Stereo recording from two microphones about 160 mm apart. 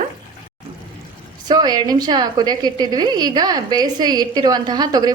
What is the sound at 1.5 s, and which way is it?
A woman's voice, 25° right (ahead or behind).